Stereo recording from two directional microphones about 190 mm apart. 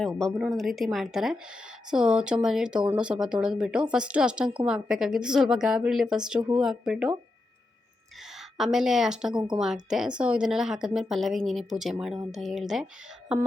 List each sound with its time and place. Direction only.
0.0 s a woman's voice: 5° left (ahead or behind)
8.4 s a woman's voice: centre (ahead or behind)
9.3 s speech: 25° right (ahead or behind)
9.6 s a woman's voice: 5° right (ahead or behind)